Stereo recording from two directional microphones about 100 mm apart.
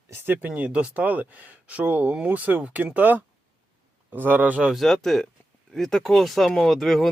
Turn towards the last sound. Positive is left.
turn(degrees=0)  # may be behind; listen again after turning